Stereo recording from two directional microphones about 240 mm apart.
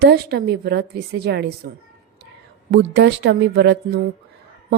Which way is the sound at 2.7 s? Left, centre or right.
Right.